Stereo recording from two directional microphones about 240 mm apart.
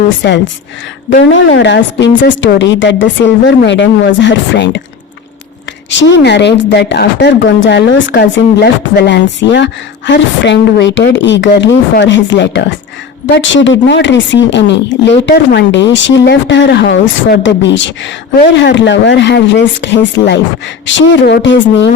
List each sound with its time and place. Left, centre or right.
0.2 s speech: left
5.9 s speech: left